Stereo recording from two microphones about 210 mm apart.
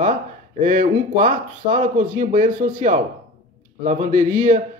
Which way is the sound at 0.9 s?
40° right (ahead or behind).